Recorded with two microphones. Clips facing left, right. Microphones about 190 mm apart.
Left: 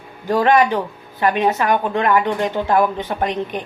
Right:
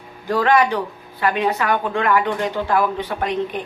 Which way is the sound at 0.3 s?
20° left (ahead or behind).